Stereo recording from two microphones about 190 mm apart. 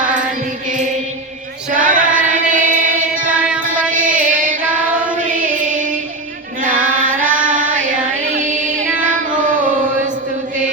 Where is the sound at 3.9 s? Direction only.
45° right (ahead or behind).